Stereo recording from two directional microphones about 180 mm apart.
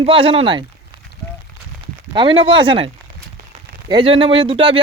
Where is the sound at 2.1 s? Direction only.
25° right (ahead or behind).